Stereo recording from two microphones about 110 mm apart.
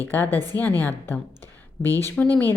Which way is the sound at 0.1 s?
20° left (ahead or behind).